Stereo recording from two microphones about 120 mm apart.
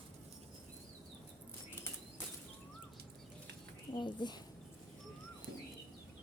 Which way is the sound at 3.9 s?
40° left (ahead or behind).